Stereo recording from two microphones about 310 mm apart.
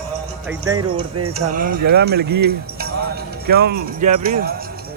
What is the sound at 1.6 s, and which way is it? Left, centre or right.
Speech, right.